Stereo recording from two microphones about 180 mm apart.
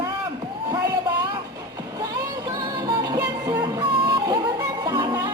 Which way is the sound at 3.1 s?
20° right (ahead or behind).